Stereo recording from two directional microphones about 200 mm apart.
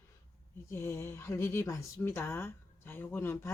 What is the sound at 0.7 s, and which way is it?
Speech, 10° left (ahead or behind).